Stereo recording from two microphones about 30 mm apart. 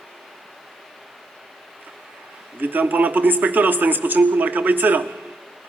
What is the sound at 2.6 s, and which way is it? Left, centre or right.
Speech, right.